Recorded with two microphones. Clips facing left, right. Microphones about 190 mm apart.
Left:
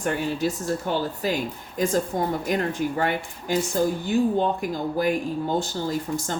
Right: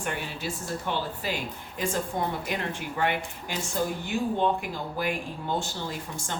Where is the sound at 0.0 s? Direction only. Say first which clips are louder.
Left 8 dB; 40° left (ahead or behind).